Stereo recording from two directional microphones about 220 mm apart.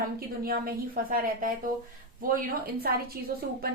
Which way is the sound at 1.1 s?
40° right (ahead or behind).